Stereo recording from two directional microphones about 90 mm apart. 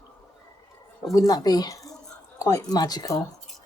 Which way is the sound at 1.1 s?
45° left (ahead or behind).